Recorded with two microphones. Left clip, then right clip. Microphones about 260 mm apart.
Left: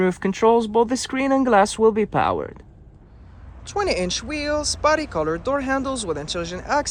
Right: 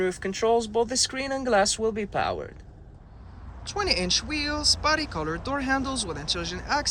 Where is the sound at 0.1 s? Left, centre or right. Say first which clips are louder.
Left 6 dB; centre.